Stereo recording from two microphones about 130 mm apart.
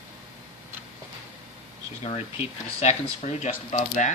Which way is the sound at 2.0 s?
50° left (ahead or behind).